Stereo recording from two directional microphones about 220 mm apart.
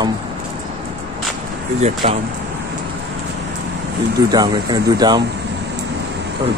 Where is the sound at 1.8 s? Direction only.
25° right (ahead or behind).